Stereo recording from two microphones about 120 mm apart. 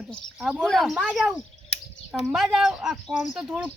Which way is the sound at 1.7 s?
60° left (ahead or behind).